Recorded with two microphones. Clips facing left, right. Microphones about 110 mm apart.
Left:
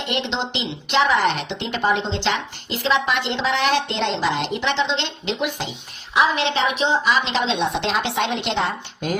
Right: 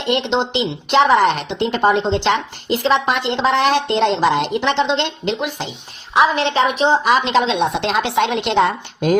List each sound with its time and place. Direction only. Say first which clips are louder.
0.1 s a woman's voice: right 8 dB; 40° right (ahead or behind); by 9.1 s 55° right (ahead or behind)